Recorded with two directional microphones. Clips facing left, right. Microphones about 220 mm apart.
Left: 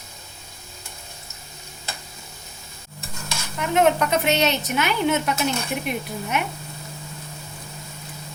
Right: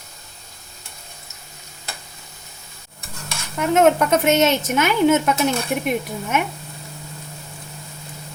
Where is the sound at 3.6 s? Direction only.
45° right (ahead or behind).